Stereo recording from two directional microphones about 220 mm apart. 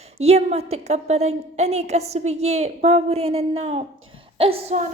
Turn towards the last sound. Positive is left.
turn(degrees=-25)  # may be behind; listen again after turning